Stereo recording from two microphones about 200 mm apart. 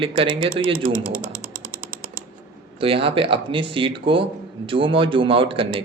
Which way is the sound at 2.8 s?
25° right (ahead or behind).